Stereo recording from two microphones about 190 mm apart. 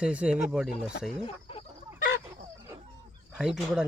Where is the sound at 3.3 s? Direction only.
5° right (ahead or behind).